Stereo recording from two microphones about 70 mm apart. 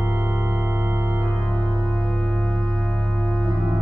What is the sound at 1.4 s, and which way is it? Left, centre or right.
Organ, centre.